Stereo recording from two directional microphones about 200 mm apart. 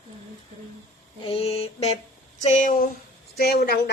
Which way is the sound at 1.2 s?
30° left (ahead or behind).